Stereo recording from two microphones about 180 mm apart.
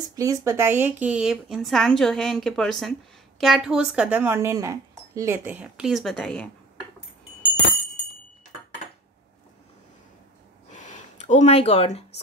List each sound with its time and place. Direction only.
0.1 s speech: 20° right (ahead or behind); by 6.5 s 5° left (ahead or behind)
10.7 s gasp: 40° left (ahead or behind)